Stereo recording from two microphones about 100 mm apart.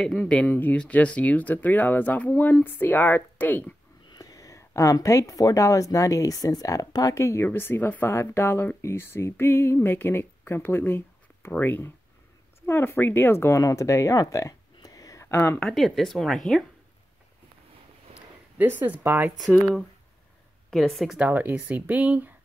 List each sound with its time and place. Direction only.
0.0 s a woman's voice: 10° left (ahead or behind)
4.1 s a woman's voice: 35° left (ahead or behind)
15.6 s speech: centre (ahead or behind)
18.6 s speech: 20° right (ahead or behind)
20.7 s speech: centre (ahead or behind)
21.2 s speech: 15° right (ahead or behind)